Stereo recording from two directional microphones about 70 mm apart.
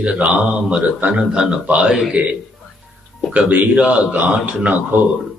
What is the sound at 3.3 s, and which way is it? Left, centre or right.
A man's voice, right.